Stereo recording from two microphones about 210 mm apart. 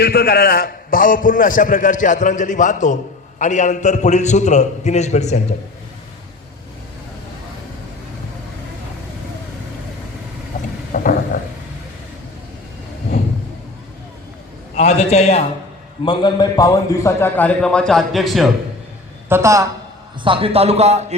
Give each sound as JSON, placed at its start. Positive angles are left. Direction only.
{"t": 0.0, "sound": "a man's voice", "side_deg": 45}
{"t": 10.9, "sound": "a sound", "side_deg": 35}
{"t": 11.3, "sound": "a man's voice", "side_deg": 35}
{"t": 14.8, "sound": "a man's voice", "side_deg": 30}
{"t": 19.3, "sound": "a woman's voice", "side_deg": -15}
{"t": 20.2, "sound": "a man's voice", "side_deg": -25}